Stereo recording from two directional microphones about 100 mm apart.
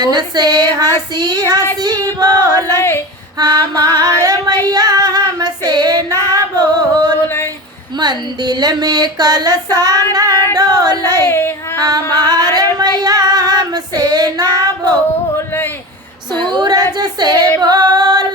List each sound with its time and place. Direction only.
0.0 s female singing: 45° right (ahead or behind)
1.8 s child singing: 45° right (ahead or behind)
2.7 s a sound: 25° left (ahead or behind)
3.3 s female singing: 40° right (ahead or behind)
4.6 s child singing: 40° right (ahead or behind)
6.2 s music: 40° right (ahead or behind)
7.9 s female singing: 45° right (ahead or behind)
11.3 s child singing: 20° left (ahead or behind)
11.8 s female singing: 40° right (ahead or behind)
16.5 s a sound: 45° right (ahead or behind)
17.6 s female singing: 40° right (ahead or behind)